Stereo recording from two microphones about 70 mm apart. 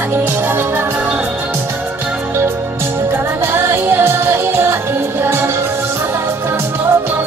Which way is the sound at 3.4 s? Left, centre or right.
Right.